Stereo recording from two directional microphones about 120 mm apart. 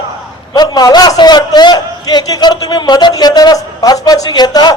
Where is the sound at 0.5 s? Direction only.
35° left (ahead or behind).